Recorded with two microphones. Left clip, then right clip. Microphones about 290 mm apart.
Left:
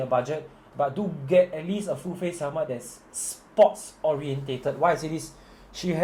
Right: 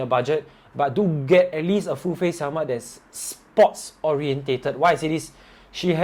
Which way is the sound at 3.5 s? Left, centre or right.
Right.